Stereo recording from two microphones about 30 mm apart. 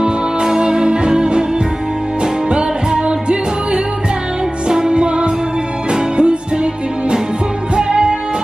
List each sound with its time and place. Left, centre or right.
0.0 s music: right
2.5 s music: right